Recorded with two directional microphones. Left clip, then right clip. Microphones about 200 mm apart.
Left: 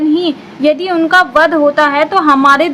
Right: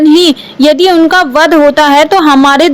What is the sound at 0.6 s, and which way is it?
A woman's voice, 30° right (ahead or behind).